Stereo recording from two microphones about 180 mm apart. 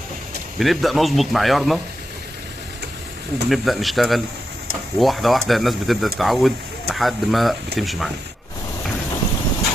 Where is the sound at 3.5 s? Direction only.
Centre (ahead or behind).